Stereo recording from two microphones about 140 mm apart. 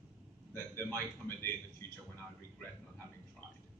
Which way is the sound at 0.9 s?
15° left (ahead or behind).